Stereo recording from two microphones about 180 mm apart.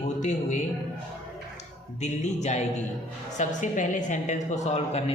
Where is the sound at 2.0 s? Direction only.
40° left (ahead or behind).